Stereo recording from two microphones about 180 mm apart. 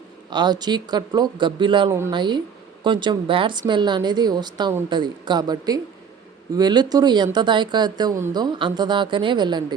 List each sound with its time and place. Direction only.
0.3 s speech: 25° right (ahead or behind)